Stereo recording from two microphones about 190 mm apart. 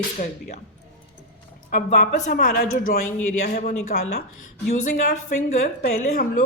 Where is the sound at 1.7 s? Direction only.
45° left (ahead or behind).